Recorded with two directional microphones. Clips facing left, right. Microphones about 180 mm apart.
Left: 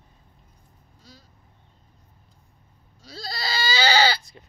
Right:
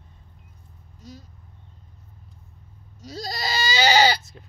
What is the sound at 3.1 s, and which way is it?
Goat, 15° right (ahead or behind).